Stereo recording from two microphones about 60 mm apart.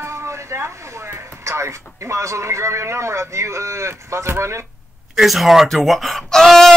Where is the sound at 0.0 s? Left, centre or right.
Right.